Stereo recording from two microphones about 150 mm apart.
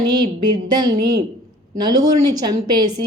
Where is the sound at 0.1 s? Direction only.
30° right (ahead or behind).